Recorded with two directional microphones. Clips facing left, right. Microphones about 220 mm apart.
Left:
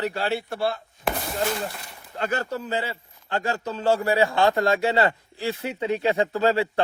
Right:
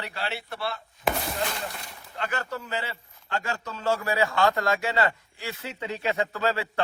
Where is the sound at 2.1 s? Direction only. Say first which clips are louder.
Left 5 dB; 40° left (ahead or behind).